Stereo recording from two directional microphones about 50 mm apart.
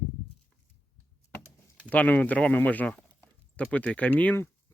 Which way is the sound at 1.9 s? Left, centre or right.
Left.